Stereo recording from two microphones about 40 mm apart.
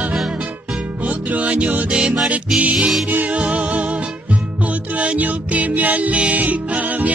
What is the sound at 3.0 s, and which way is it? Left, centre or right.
Music, right.